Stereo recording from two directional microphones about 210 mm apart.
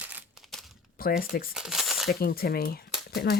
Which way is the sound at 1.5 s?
Centre (ahead or behind).